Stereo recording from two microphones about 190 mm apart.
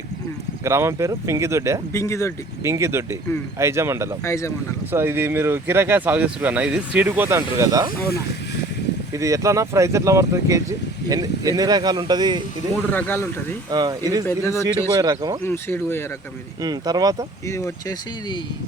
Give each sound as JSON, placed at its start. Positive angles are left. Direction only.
{"t": 0.6, "sound": "speech", "side_deg": -15}
{"t": 1.9, "sound": "speech", "side_deg": 15}
{"t": 2.6, "sound": "speech", "side_deg": -15}
{"t": 4.2, "sound": "speech", "side_deg": 15}
{"t": 4.9, "sound": "speech", "side_deg": -10}
{"t": 9.1, "sound": "speech", "side_deg": -15}
{"t": 12.9, "sound": "speech", "side_deg": 10}
{"t": 13.7, "sound": "speech", "side_deg": -20}
{"t": 14.3, "sound": "speech", "side_deg": 15}
{"t": 14.9, "sound": "speech", "side_deg": -20}
{"t": 15.4, "sound": "speech", "side_deg": 10}
{"t": 16.6, "sound": "speech", "side_deg": -20}
{"t": 17.5, "sound": "speech", "side_deg": 20}